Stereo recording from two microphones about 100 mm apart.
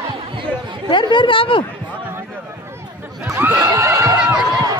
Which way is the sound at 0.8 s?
50° left (ahead or behind).